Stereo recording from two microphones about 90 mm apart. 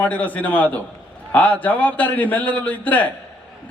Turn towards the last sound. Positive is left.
turn(degrees=15)  # may be behind; listen again after turning